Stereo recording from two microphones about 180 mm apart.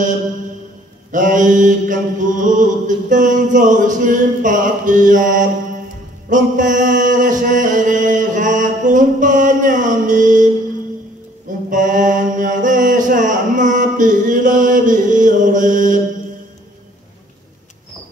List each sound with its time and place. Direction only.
1.1 s mantra: 45° right (ahead or behind)
6.2 s chant: 45° right (ahead or behind)
11.4 s mantra: 45° right (ahead or behind)